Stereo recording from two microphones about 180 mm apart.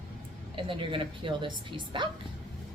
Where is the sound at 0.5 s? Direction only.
30° right (ahead or behind).